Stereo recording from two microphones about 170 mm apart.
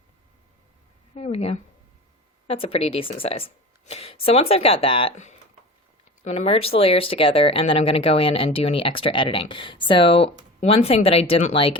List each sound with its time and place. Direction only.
1.1 s a woman's voice: 40° left (ahead or behind)
5.1 s a woman's voice: 45° left (ahead or behind)